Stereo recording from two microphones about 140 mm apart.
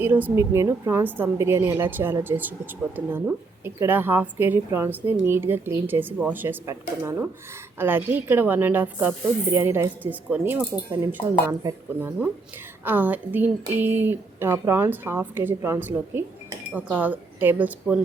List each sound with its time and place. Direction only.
0.0 s speech: 15° right (ahead or behind)
11.9 s speech: 15° right (ahead or behind)